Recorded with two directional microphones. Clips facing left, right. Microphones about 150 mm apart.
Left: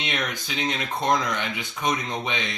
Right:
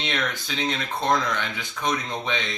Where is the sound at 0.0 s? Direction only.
15° left (ahead or behind).